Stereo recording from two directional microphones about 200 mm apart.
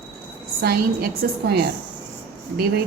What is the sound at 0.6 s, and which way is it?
A woman's voice, 50° right (ahead or behind).